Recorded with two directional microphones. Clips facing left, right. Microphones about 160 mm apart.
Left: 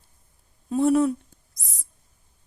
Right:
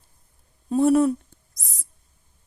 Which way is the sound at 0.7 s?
45° right (ahead or behind).